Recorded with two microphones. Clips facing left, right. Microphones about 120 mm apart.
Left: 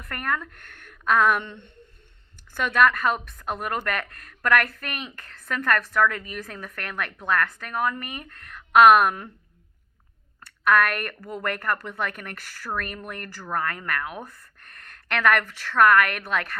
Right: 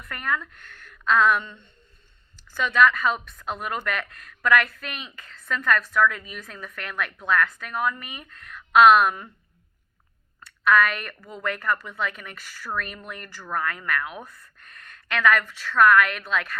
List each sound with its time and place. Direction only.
0.1 s a woman's voice: 50° left (ahead or behind)
2.3 s a woman's voice: 55° left (ahead or behind)
10.4 s a woman's voice: 50° left (ahead or behind)
15.1 s a woman's voice: 60° left (ahead or behind)